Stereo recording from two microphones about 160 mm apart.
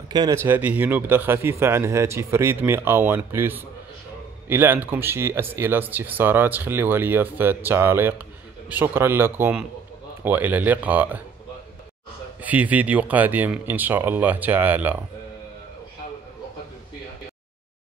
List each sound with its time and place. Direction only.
0.1 s speech: 25° right (ahead or behind)
0.4 s speech: 10° right (ahead or behind)
12.4 s speech: 10° right (ahead or behind)